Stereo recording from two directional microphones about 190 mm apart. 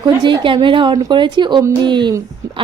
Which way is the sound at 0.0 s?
25° right (ahead or behind).